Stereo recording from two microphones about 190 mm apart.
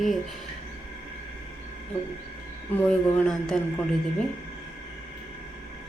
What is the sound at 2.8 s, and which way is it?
Speech, 5° left (ahead or behind).